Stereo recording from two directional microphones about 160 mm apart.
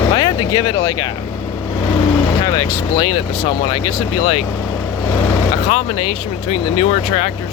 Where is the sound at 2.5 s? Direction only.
20° left (ahead or behind).